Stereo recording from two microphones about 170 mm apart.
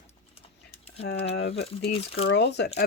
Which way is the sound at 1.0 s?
80° left.